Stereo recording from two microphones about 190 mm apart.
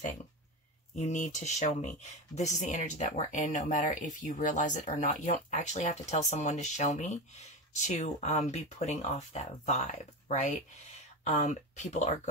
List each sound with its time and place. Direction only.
0.9 s speech: 40° left (ahead or behind)